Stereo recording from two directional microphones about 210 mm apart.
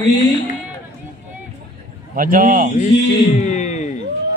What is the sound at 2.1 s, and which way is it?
Crowd, 40° right (ahead or behind).